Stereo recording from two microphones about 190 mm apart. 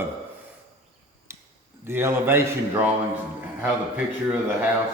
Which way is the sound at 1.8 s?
15° right (ahead or behind).